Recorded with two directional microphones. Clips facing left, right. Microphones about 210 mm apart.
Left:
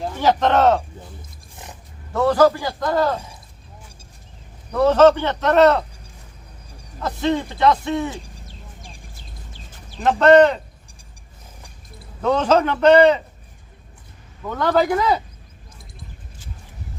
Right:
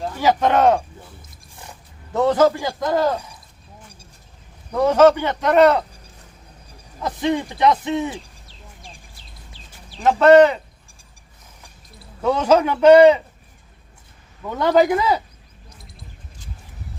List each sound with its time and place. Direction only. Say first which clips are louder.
0.2 s speech: even; 10° right (ahead or behind)
2.1 s a man's voice: even; 20° right (ahead or behind)
4.7 s speech: even; 10° right (ahead or behind)
7.0 s speech: even; 15° right (ahead or behind)
10.0 s speech: right 1 dB; 5° right (ahead or behind)
12.2 s speech: right 1 dB; 10° right (ahead or behind)
14.5 s speech: right 2 dB; 15° right (ahead or behind)